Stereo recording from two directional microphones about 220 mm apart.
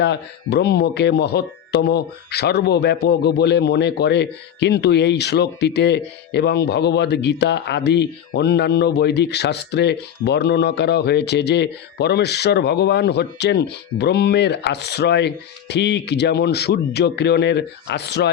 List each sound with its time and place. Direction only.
0.0 s speech: 50° left (ahead or behind)